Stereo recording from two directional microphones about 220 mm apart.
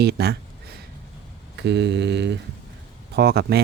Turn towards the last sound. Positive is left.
turn(degrees=-45)  # may be behind; listen again after turning